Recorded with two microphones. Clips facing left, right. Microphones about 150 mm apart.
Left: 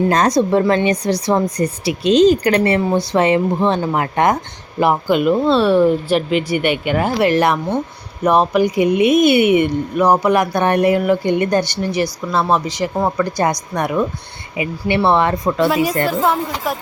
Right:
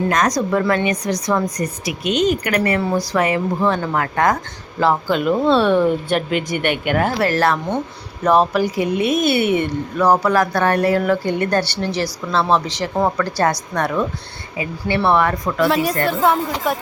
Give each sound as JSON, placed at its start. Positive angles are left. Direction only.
{"t": 0.1, "sound": "a woman's voice", "side_deg": 30}
{"t": 5.2, "sound": "speech", "side_deg": 5}
{"t": 7.3, "sound": "a woman's voice", "side_deg": 15}
{"t": 15.7, "sound": "speech", "side_deg": 5}